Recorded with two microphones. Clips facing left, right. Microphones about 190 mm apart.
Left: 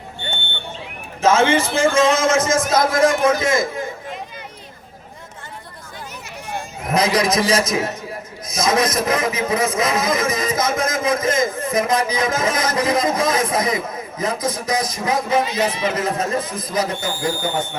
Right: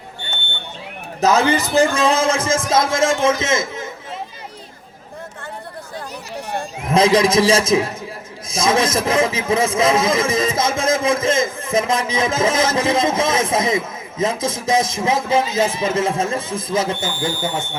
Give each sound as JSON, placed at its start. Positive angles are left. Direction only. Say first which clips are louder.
{"t": 1.2, "sound": "a man's voice", "louder": "left 1 dB", "side_deg": -40}
{"t": 6.3, "sound": "a sound", "louder": "right 4 dB", "side_deg": -30}
{"t": 8.4, "sound": "speech", "louder": "right 1 dB", "side_deg": -25}